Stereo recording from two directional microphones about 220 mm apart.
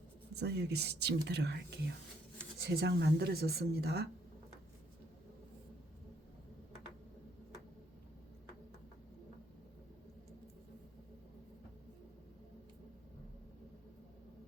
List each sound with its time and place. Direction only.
0.3 s speech: 50° right (ahead or behind)